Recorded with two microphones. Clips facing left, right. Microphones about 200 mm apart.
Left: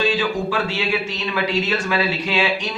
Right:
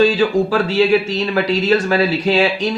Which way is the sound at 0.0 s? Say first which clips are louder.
Right 7 dB; 40° right (ahead or behind).